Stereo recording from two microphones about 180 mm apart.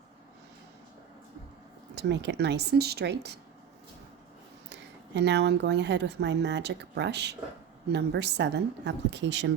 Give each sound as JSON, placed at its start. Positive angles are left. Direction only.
{"t": 2.0, "sound": "speech", "side_deg": -75}
{"t": 4.7, "sound": "speech", "side_deg": -75}